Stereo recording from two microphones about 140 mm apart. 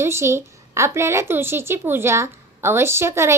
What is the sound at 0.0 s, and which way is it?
A woman's voice, 20° right (ahead or behind).